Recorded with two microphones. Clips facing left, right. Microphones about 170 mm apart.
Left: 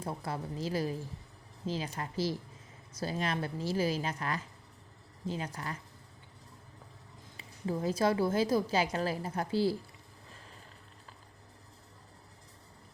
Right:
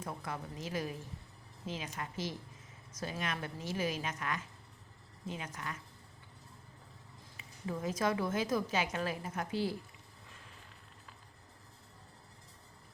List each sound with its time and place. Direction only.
0.0 s a woman's voice: 30° left (ahead or behind)
7.3 s a woman's voice: 30° left (ahead or behind)